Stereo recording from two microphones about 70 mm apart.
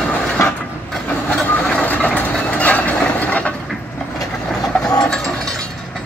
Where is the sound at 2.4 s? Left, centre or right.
Centre.